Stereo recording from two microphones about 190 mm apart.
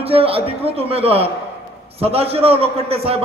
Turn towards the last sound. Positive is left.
turn(degrees=-30)  # may be behind; listen again after turning